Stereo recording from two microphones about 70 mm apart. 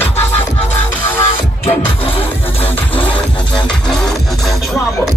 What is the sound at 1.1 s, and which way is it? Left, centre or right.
Music, left.